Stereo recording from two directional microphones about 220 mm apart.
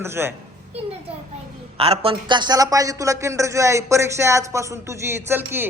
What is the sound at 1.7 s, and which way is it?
A man's voice, 25° right (ahead or behind).